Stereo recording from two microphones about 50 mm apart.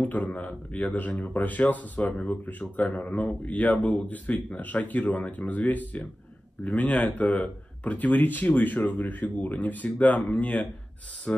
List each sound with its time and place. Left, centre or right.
0.0 s speech: left